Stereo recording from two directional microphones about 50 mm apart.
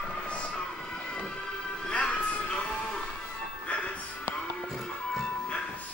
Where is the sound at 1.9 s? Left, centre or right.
Left.